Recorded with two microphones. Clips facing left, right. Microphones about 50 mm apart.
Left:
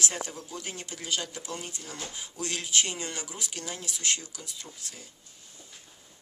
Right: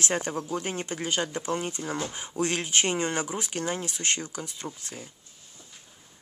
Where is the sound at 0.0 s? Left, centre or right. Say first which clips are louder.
Right 5 dB; right.